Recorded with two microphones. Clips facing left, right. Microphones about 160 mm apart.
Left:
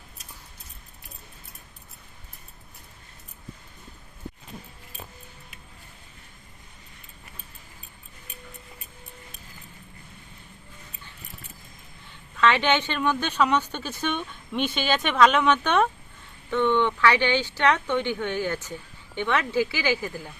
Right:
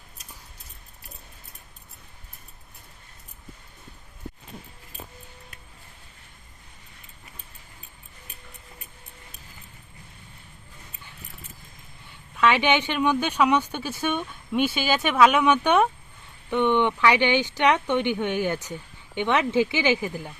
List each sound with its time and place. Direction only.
12.4 s speech: 10° right (ahead or behind)